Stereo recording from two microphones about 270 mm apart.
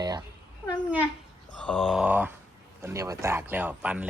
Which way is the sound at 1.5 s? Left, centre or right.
Centre.